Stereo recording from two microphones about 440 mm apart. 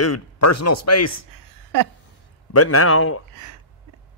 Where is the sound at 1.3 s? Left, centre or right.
Right.